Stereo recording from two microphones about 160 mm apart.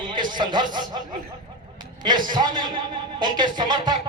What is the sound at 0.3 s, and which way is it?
Speech, 30° right (ahead or behind).